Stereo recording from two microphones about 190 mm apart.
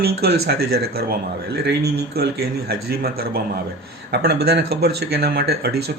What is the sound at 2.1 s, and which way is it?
Speech, 55° right (ahead or behind).